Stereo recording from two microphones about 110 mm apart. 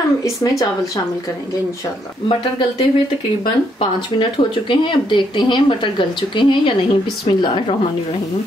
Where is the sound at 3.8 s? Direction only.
50° left (ahead or behind).